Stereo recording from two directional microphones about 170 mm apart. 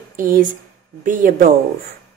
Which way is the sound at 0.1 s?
55° right (ahead or behind).